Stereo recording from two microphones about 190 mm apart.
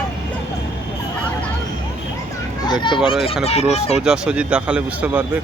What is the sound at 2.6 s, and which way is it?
Children playing, 25° left (ahead or behind).